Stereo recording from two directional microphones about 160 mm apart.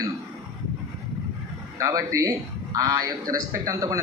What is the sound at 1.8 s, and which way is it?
A man's voice, 20° right (ahead or behind).